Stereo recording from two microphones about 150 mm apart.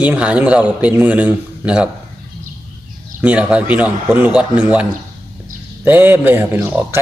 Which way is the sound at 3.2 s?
10° right (ahead or behind).